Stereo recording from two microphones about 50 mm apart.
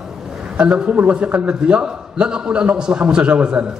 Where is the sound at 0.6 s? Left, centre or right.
Centre.